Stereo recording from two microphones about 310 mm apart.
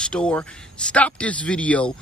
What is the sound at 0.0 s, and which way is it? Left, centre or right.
A man's voice, centre.